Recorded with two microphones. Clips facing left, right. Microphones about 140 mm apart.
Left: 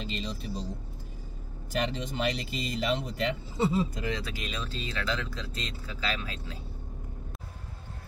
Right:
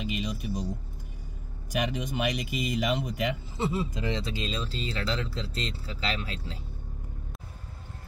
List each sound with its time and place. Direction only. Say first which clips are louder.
0.0 s speech: right 3 dB; 15° right (ahead or behind)
1.7 s speech: right 1 dB; 10° right (ahead or behind)
3.9 s speech: right 2 dB; 25° right (ahead or behind)